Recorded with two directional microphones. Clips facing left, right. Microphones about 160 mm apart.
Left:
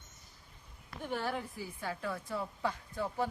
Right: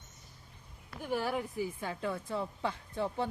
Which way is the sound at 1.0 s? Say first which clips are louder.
Right 3 dB; 10° right (ahead or behind).